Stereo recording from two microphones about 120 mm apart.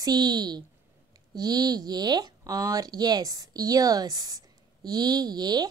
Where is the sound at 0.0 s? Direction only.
35° right (ahead or behind).